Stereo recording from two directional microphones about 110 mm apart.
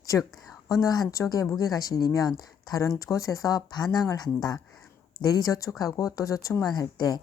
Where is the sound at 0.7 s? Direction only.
35° left (ahead or behind).